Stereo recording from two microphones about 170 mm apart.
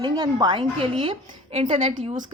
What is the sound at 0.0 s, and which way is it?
A woman's voice, 25° right (ahead or behind).